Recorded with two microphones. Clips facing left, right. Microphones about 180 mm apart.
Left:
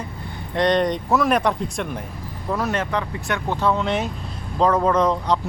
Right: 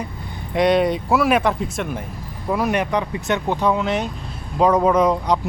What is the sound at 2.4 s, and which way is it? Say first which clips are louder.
Speech: right 3 dB; 15° right (ahead or behind).